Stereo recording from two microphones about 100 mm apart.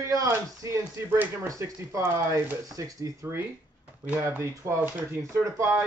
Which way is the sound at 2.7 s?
35° right (ahead or behind).